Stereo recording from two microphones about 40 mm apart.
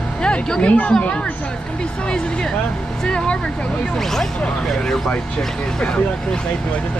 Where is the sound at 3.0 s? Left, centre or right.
Left.